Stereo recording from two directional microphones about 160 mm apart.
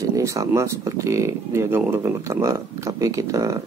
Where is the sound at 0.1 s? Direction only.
20° right (ahead or behind).